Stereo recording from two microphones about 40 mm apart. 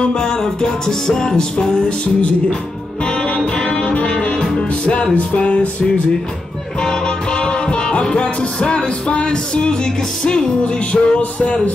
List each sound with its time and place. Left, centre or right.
0.0 s music: left
3.3 s music: left
6.8 s music: centre